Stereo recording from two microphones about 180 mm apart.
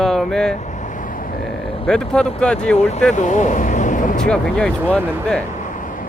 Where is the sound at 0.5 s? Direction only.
40° left (ahead or behind).